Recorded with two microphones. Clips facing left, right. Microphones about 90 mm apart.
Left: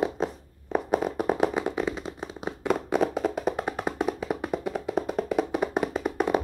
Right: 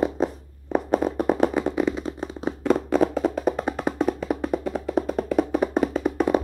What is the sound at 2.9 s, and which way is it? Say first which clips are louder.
Music: right 4 dB; 5° left (ahead or behind).